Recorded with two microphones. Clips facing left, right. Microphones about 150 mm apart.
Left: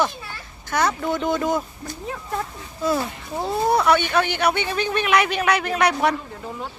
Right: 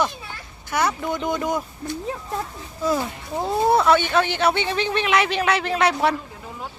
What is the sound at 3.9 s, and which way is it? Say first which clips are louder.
Speech: right 1 dB; 25° right (ahead or behind).